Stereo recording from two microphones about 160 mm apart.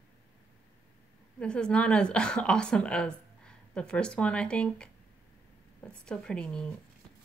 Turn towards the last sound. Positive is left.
turn(degrees=5)  # may be behind; listen again after turning